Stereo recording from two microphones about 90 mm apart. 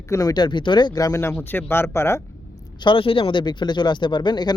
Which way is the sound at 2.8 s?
75° left (ahead or behind).